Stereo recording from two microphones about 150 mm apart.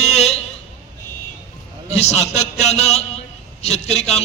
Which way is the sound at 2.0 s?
45° left (ahead or behind).